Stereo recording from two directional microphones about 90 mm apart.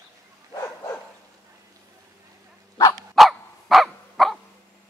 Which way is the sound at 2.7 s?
45° left (ahead or behind).